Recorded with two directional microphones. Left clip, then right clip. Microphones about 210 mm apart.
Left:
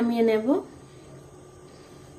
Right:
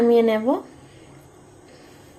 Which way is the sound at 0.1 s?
15° right (ahead or behind).